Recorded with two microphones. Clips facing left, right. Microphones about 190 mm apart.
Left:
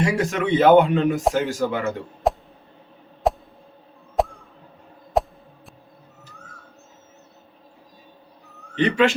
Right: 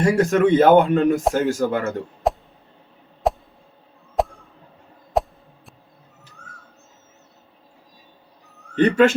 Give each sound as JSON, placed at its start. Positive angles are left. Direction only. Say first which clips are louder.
{"t": 0.0, "sound": "a man's voice", "louder": "right 5 dB", "side_deg": -45}
{"t": 2.3, "sound": "a sound", "louder": "left 1 dB", "side_deg": 0}
{"t": 8.7, "sound": "a man's voice", "louder": "right 4 dB", "side_deg": -45}